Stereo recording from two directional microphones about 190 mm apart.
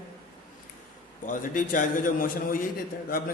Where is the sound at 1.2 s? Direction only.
45° left (ahead or behind).